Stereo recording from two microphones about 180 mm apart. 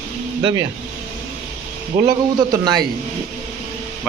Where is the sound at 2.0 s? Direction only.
20° right (ahead or behind).